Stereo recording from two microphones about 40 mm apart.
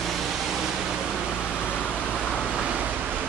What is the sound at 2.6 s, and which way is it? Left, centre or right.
Vehicle, right.